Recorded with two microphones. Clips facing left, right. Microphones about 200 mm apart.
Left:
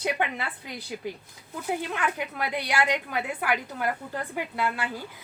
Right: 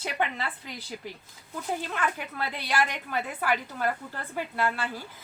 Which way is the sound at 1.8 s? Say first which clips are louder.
Left 2 dB; 15° left (ahead or behind).